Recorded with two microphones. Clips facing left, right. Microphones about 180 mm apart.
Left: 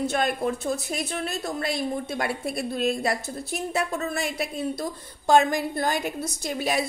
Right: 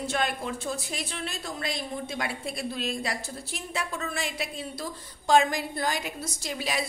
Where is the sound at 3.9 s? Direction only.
40° left (ahead or behind).